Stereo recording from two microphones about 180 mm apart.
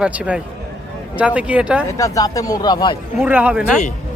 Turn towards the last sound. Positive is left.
turn(degrees=-5)  # may be behind; listen again after turning